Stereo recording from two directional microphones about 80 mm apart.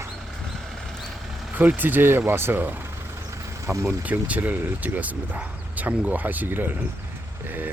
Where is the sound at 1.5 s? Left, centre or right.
Centre.